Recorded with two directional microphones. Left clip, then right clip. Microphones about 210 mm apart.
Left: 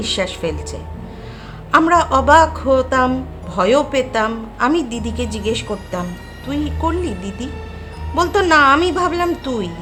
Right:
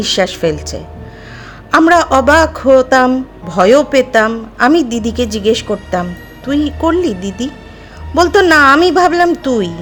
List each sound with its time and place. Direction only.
0.0 s a woman's voice: 25° right (ahead or behind)